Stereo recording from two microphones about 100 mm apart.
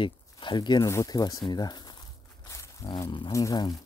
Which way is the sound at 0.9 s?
35° left (ahead or behind).